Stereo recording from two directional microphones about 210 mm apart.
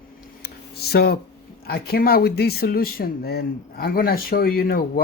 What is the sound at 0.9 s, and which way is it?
Speech, 50° left (ahead or behind).